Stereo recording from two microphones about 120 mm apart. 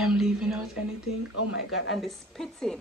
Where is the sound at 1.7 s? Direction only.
Centre (ahead or behind).